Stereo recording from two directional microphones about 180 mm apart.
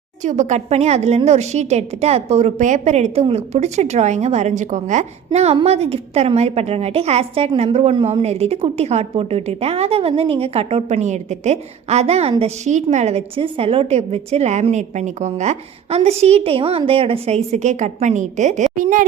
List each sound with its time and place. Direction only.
0.2 s a woman's voice: 40° right (ahead or behind)